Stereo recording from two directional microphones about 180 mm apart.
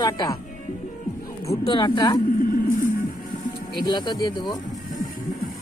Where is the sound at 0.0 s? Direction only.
20° left (ahead or behind).